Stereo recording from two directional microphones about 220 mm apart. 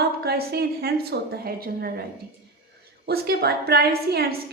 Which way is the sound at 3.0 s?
45° right (ahead or behind).